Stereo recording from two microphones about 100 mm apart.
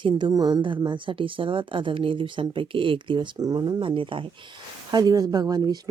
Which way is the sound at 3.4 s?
40° right (ahead or behind).